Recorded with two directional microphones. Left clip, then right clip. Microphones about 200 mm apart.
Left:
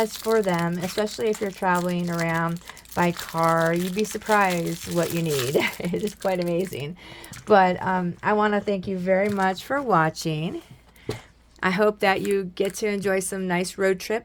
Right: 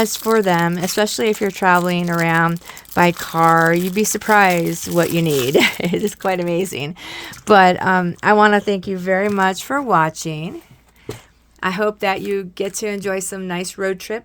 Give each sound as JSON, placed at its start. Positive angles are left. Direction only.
{"t": 0.0, "sound": "speech", "side_deg": -55}
{"t": 5.3, "sound": "speech", "side_deg": -10}
{"t": 5.5, "sound": "speech", "side_deg": -55}
{"t": 11.6, "sound": "speech", "side_deg": -10}